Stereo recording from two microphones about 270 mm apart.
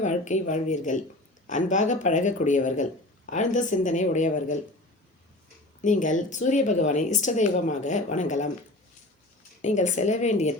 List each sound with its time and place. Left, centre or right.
0.0 s speech: left
5.8 s speech: left
9.6 s speech: left